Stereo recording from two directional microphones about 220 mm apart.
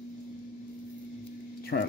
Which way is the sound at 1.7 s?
50° left (ahead or behind).